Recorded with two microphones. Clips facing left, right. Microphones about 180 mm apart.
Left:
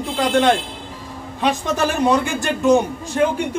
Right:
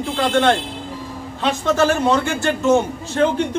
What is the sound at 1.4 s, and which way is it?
A man's voice, 15° left (ahead or behind).